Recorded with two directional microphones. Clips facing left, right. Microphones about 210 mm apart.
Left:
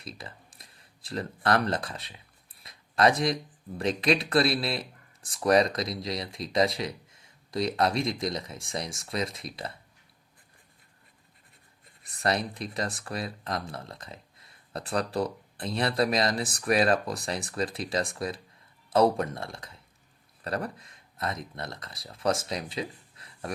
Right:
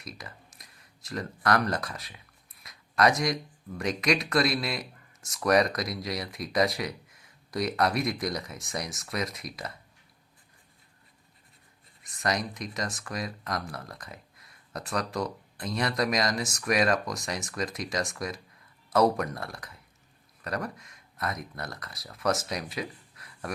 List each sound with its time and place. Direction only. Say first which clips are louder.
0.0 s speech: left 1 dB; 30° left (ahead or behind)
12.0 s speech: left 2 dB; 35° left (ahead or behind)